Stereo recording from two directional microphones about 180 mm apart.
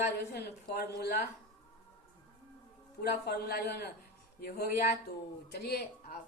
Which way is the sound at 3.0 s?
65° left (ahead or behind).